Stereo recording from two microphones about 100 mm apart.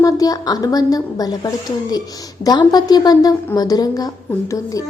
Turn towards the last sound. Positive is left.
turn(degrees=35)  # may be behind; listen again after turning